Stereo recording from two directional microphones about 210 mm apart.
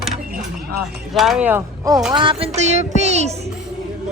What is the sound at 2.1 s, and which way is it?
Music, 25° right (ahead or behind).